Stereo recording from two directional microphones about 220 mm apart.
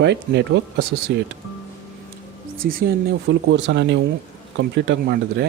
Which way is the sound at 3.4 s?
55° right (ahead or behind).